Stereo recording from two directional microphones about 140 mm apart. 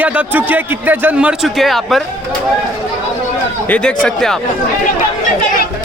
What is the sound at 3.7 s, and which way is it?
Speech, 5° left (ahead or behind).